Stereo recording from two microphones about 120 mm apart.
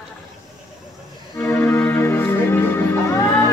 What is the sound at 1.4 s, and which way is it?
Music, 15° left (ahead or behind).